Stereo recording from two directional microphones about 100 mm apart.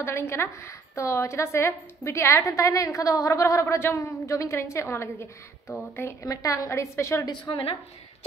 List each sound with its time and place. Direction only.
0.0 s a woman's voice: 25° left (ahead or behind)
7.2 s a woman's voice: 50° left (ahead or behind)